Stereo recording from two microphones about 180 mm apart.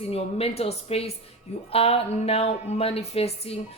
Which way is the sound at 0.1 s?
35° left (ahead or behind).